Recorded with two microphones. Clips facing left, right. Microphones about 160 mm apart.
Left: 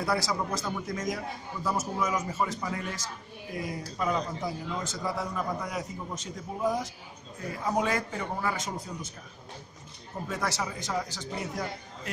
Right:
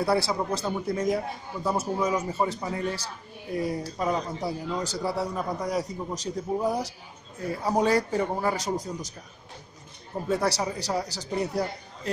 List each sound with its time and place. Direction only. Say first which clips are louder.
0.0 s a man's voice: right 4 dB; 30° right (ahead or behind)
10.2 s a man's voice: right 6 dB; 35° right (ahead or behind)